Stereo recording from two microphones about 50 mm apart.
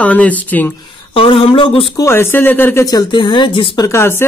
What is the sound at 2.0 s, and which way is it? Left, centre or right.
Speech, left.